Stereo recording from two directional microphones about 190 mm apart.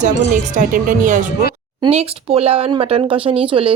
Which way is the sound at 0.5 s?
45° right (ahead or behind).